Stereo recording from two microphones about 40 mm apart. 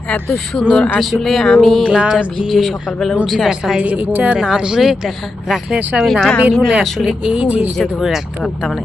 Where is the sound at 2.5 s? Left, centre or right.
Centre.